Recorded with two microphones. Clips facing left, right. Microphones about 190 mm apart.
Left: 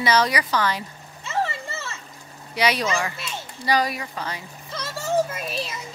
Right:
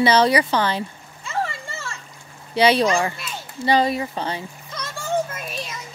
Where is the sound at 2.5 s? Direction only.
30° right (ahead or behind).